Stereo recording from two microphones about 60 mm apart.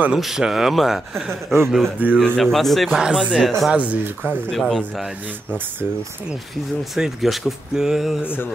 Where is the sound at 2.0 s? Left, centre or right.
Right.